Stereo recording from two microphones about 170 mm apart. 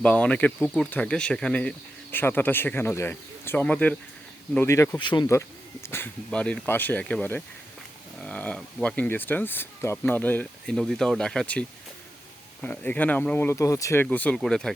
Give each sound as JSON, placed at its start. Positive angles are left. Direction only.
{"t": 0.0, "sound": "speech", "side_deg": 5}
{"t": 4.9, "sound": "speech", "side_deg": 25}
{"t": 12.6, "sound": "speech", "side_deg": 10}